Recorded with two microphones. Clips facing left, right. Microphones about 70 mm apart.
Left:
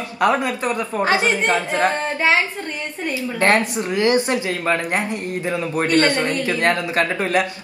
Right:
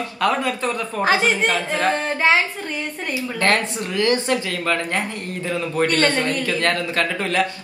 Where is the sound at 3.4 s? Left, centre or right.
Left.